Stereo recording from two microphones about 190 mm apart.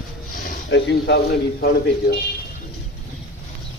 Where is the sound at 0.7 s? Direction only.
65° left (ahead or behind).